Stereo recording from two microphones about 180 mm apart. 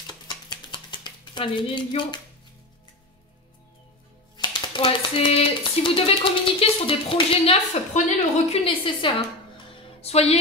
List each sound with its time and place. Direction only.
0.0 s stir: 25° left (ahead or behind)
4.4 s speech: 25° left (ahead or behind)